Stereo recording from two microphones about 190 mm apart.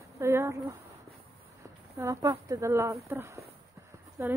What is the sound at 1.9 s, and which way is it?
Speech, 15° right (ahead or behind).